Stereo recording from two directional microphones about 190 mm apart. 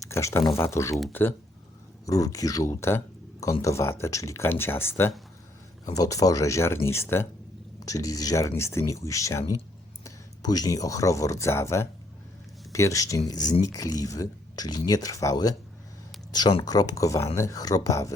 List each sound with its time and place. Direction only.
0.0 s speech: 15° left (ahead or behind)
2.0 s speech: 20° left (ahead or behind)